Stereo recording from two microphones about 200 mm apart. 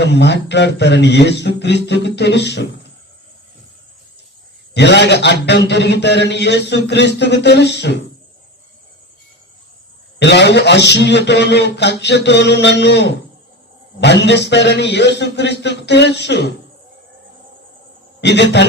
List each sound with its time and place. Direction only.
0.0 s a man's voice: 60° left (ahead or behind)
4.7 s a man's voice: 60° left (ahead or behind)
10.2 s a man's voice: 60° left (ahead or behind)
18.2 s a man's voice: 60° left (ahead or behind)